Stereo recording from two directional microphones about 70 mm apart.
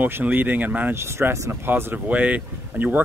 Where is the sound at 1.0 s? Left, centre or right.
Right.